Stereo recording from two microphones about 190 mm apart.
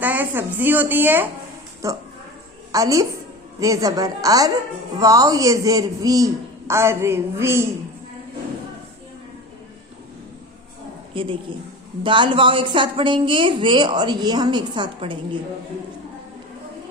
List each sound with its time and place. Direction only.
0.0 s a man's voice: 10° right (ahead or behind)
11.1 s a woman's voice: 25° right (ahead or behind)